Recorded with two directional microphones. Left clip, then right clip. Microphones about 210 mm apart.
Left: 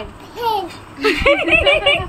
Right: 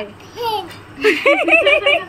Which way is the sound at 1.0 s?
10° right (ahead or behind).